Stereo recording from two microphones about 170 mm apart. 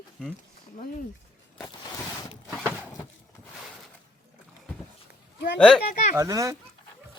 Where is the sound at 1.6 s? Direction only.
20° left (ahead or behind).